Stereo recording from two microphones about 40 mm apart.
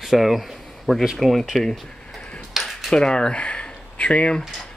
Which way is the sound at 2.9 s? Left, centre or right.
Centre.